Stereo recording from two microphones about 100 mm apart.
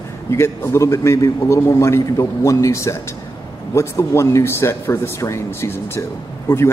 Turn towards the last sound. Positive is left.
turn(degrees=25)  # may be behind; listen again after turning